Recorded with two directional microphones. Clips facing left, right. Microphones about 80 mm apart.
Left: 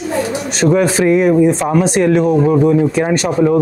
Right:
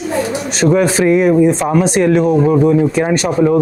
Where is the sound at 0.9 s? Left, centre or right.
Centre.